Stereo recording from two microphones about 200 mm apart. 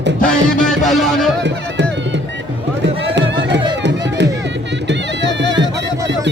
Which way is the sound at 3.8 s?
60° right (ahead or behind).